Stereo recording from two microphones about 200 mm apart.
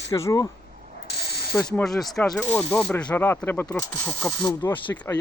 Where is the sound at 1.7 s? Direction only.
Centre (ahead or behind).